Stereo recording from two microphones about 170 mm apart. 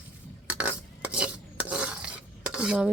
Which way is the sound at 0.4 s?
10° right (ahead or behind).